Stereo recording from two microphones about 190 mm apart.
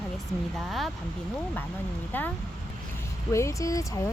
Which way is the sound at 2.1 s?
10° left (ahead or behind).